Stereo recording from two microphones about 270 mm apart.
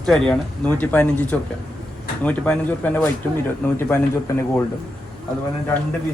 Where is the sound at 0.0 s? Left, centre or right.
Centre.